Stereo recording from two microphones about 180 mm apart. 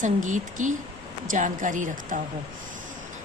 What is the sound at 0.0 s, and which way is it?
Speech, 45° right (ahead or behind).